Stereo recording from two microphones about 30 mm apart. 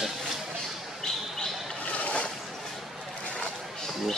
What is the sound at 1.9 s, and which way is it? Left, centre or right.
Boat, left.